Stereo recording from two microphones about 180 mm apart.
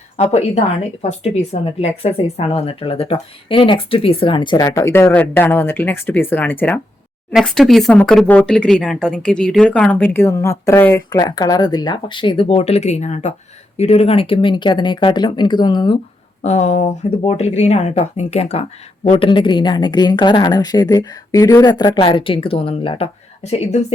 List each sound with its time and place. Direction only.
0.2 s a woman's voice: 40° left (ahead or behind)
16.4 s a woman's voice: 35° left (ahead or behind)